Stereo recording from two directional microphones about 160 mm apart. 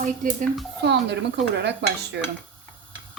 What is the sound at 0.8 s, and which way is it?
Dishes, 90° right.